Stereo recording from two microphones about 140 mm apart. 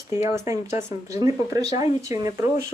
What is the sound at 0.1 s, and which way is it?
Speech, 20° right (ahead or behind).